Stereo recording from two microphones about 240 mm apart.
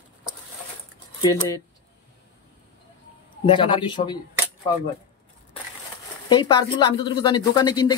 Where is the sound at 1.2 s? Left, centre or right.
Centre.